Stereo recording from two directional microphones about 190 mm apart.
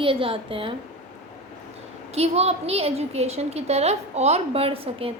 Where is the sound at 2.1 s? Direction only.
35° right (ahead or behind).